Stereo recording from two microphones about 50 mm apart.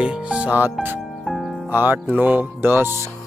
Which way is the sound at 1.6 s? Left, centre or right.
Right.